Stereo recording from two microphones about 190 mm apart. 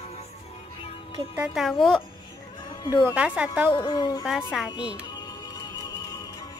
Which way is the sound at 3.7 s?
20° left (ahead or behind).